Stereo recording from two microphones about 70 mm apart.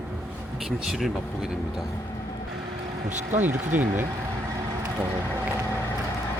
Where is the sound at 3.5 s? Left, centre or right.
Right.